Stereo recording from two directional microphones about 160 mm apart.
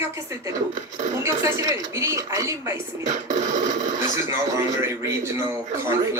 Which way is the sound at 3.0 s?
50° right (ahead or behind).